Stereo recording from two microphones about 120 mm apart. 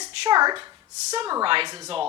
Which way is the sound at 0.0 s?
35° right (ahead or behind).